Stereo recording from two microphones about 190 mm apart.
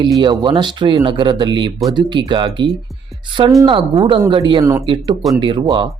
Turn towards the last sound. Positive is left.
turn(degrees=-25)  # may be behind; listen again after turning